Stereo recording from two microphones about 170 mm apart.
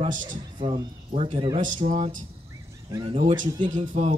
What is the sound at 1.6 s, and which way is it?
Speech, 45° right (ahead or behind).